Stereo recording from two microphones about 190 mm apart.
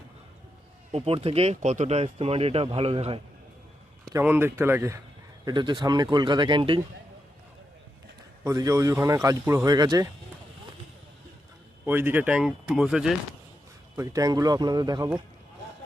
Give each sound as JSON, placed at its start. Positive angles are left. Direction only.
{"t": 0.9, "sound": "speech", "side_deg": -30}
{"t": 4.1, "sound": "speech", "side_deg": -10}
{"t": 5.5, "sound": "speech", "side_deg": -25}
{"t": 8.4, "sound": "speech", "side_deg": -15}
{"t": 11.9, "sound": "speech", "side_deg": -10}
{"t": 13.9, "sound": "speech", "side_deg": -20}